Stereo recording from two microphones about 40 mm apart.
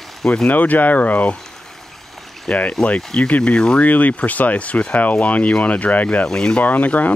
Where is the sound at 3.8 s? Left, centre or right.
Left.